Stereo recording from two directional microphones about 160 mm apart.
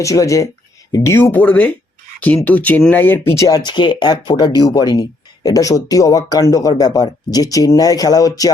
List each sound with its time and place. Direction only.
0.0 s speech: 20° left (ahead or behind)